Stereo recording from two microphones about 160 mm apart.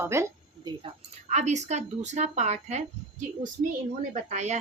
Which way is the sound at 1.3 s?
45° right (ahead or behind).